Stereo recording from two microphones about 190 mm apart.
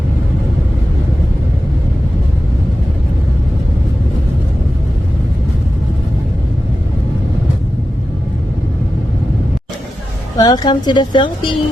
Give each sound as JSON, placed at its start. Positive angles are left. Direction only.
{"t": 10.3, "sound": "a woman's voice", "side_deg": 20}